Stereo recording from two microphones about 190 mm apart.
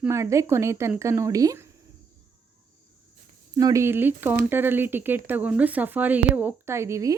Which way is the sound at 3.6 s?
15° right (ahead or behind).